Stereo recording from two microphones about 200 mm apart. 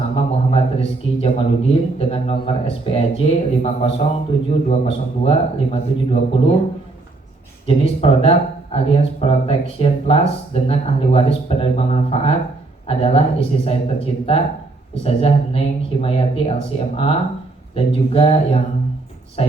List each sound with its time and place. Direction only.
0.2 s a man's voice: 30° left (ahead or behind)
7.7 s a man's voice: 30° left (ahead or behind)